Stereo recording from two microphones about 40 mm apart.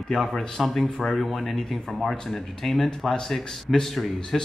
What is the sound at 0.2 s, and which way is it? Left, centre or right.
Speech, centre.